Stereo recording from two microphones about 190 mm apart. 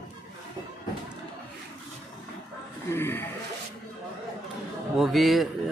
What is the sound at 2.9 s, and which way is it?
Speech, 10° left (ahead or behind).